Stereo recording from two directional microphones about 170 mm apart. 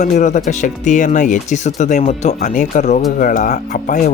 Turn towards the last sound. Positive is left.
turn(degrees=50)  # may be behind; listen again after turning